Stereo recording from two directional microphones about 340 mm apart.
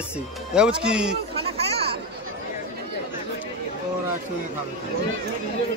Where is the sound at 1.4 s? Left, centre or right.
Centre.